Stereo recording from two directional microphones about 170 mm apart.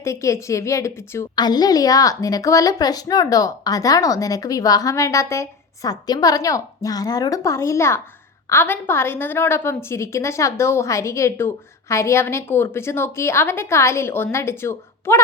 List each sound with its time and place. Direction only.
0.0 s a woman's voice: 15° left (ahead or behind)